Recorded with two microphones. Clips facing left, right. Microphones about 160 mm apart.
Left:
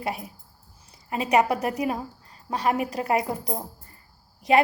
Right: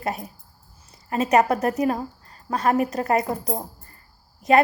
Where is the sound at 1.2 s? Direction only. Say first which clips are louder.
Right 3 dB; 40° right (ahead or behind).